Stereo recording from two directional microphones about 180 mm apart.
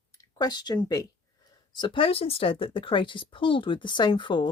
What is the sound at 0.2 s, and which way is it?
Speech, 20° left (ahead or behind).